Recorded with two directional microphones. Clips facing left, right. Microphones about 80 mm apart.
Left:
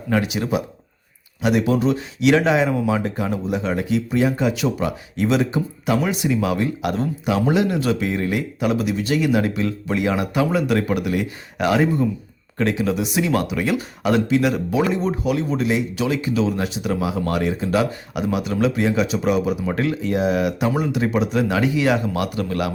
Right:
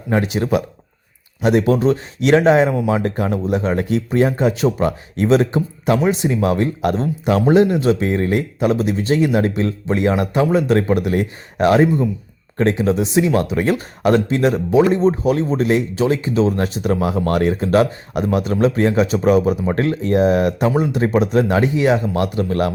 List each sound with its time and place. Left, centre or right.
0.1 s speech: right